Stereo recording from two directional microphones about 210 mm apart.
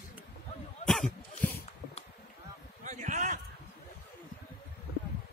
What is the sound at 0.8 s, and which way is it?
Cough, 5° left (ahead or behind).